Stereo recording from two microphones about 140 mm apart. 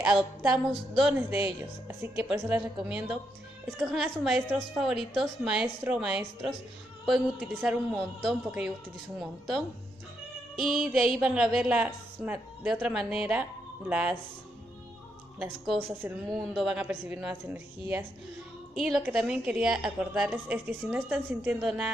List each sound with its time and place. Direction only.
0.0 s a woman's voice: 5° right (ahead or behind)
1.1 s a woman's voice: 15° right (ahead or behind)
10.6 s a woman's voice: 5° right (ahead or behind)
15.7 s a woman's voice: centre (ahead or behind)
18.8 s a woman's voice: 5° right (ahead or behind)